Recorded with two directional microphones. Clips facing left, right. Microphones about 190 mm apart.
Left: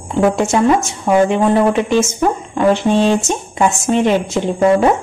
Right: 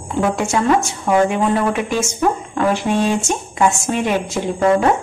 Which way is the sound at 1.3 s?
25° left (ahead or behind).